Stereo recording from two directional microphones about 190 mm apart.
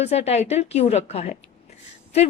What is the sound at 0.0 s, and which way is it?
A woman's voice, 35° left (ahead or behind).